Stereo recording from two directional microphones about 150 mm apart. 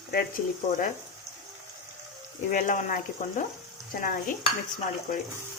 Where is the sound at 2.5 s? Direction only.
60° left (ahead or behind).